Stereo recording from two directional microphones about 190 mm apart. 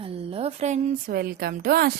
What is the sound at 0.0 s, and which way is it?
A woman's voice, 30° right (ahead or behind).